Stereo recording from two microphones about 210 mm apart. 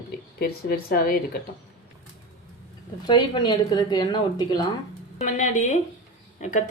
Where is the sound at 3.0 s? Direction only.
20° left (ahead or behind).